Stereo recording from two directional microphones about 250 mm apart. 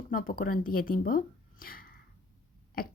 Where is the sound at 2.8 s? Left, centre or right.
Left.